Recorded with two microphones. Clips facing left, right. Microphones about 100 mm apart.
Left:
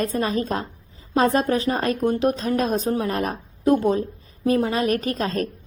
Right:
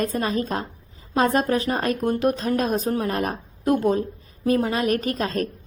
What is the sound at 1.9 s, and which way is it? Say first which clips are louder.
Speech: left 1 dB; 35° left (ahead or behind).